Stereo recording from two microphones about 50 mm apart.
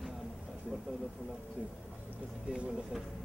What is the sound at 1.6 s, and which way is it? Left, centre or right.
Speech, right.